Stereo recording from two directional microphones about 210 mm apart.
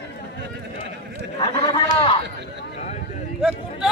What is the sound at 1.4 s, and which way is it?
Speech, 20° left (ahead or behind).